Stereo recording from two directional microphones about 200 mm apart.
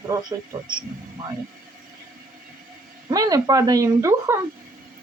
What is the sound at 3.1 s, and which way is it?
Speech, 15° right (ahead or behind).